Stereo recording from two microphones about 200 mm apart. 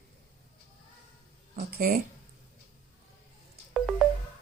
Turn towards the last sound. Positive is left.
turn(degrees=0)  # may be behind; listen again after turning